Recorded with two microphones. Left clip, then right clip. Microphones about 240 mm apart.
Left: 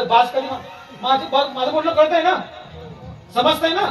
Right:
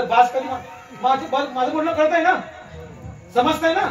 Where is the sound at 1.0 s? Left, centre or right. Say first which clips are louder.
Left 2 dB; left.